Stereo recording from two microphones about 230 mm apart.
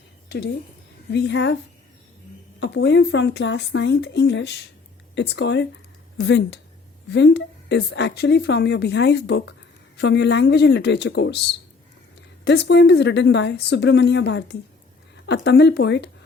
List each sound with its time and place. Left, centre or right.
0.3 s a woman's voice: left
2.6 s a woman's voice: left